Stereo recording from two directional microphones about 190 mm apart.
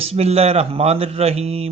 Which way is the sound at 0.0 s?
30° right (ahead or behind).